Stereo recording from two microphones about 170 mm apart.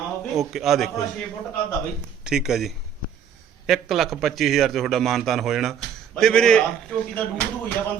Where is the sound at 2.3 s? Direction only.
5° right (ahead or behind).